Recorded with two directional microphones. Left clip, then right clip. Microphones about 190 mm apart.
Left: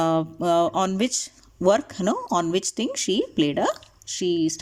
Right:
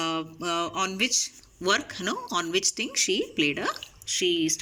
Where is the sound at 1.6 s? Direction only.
35° left (ahead or behind).